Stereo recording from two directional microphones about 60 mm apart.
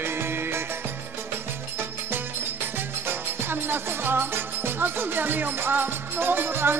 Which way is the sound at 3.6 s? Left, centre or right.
Right.